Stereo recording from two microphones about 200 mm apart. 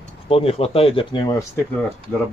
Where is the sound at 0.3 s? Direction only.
30° left (ahead or behind).